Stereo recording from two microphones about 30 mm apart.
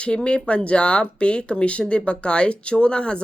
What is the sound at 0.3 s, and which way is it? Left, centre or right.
Speech, left.